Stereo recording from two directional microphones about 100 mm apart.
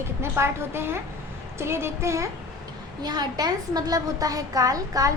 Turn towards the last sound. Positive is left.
turn(degrees=-35)  # may be behind; listen again after turning